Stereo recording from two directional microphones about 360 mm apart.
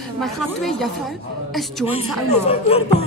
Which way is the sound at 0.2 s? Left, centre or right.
Centre.